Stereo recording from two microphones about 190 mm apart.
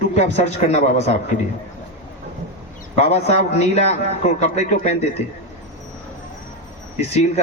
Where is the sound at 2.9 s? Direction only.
35° left (ahead or behind).